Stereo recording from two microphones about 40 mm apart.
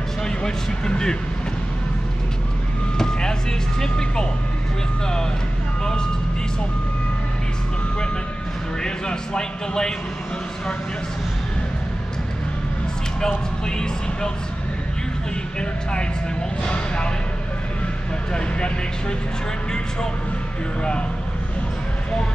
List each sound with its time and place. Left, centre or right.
0.2 s speech: centre
3.0 s vehicle: centre
8.8 s a man's voice: centre
13.7 s a man's voice: centre
16.6 s speech: left
18.3 s speech: left